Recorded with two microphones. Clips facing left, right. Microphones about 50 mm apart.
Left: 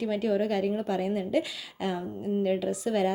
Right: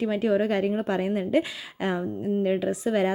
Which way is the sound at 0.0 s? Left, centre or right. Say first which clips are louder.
Right 3 dB; right.